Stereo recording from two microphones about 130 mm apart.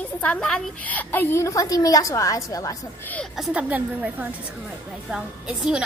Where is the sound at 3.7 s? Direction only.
15° right (ahead or behind).